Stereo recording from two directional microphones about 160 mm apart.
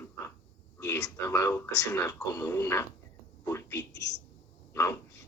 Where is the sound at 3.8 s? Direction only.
90° left.